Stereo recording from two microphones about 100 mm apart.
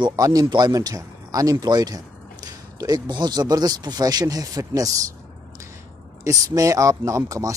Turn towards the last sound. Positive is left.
turn(degrees=-35)  # may be behind; listen again after turning